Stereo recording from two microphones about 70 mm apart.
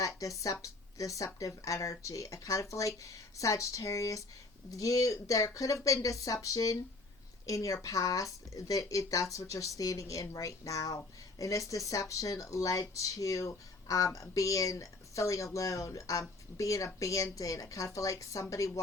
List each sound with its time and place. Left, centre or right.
0.0 s speech: left